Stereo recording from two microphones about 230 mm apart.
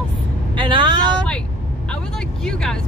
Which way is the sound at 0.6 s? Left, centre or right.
Right.